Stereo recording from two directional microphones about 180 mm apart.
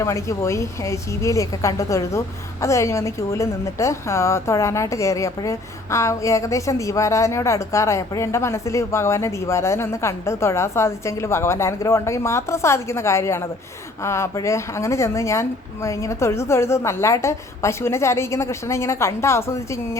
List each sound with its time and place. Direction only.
0.0 s a woman's voice: 15° left (ahead or behind)